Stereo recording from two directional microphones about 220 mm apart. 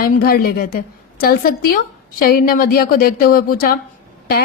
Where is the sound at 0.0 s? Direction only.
45° left (ahead or behind).